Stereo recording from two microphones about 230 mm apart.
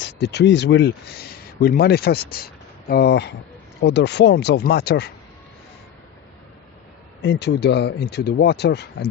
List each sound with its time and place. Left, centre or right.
0.0 s speech: left
7.2 s speech: left